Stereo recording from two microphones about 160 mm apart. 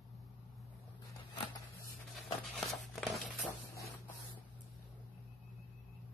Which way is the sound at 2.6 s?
Centre (ahead or behind).